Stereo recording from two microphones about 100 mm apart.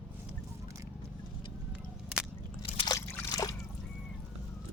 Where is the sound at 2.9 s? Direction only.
35° left (ahead or behind).